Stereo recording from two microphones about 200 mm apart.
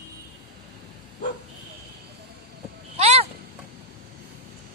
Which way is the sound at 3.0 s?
30° right (ahead or behind).